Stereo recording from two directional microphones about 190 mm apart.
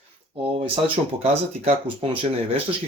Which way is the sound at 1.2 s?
35° right (ahead or behind).